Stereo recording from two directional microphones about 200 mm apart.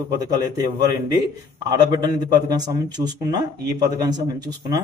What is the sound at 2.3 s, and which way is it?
A man's voice, 20° right (ahead or behind).